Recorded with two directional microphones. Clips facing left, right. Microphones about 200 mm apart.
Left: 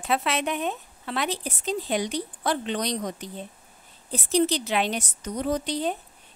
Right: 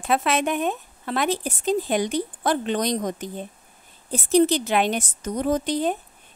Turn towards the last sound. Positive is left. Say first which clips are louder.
# right 4 dB
turn(degrees=-50)  # may be behind; listen again after turning